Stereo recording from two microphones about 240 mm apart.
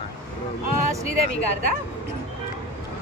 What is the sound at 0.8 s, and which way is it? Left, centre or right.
Speech, right.